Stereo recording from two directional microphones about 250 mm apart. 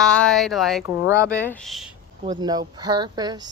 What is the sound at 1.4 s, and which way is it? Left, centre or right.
Speech, centre.